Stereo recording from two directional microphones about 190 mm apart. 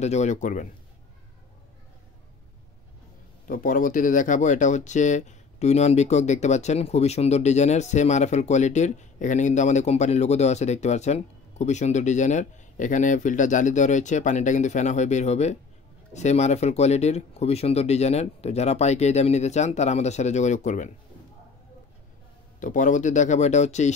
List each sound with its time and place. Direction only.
0.0 s speech: 35° left (ahead or behind)
3.4 s speech: 45° left (ahead or behind)
22.6 s speech: 40° left (ahead or behind)